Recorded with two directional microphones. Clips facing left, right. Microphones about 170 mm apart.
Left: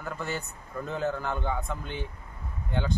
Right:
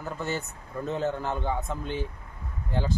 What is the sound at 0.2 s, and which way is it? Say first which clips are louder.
Speech: right 2 dB; centre (ahead or behind).